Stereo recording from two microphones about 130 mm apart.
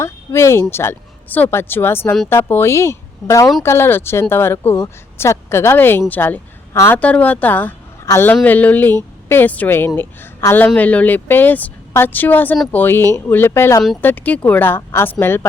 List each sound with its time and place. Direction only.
0.0 s speech: 20° left (ahead or behind)